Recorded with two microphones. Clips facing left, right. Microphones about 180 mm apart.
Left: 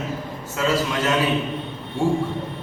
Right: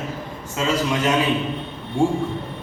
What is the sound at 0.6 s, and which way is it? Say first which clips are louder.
Speech: even; 20° right (ahead or behind).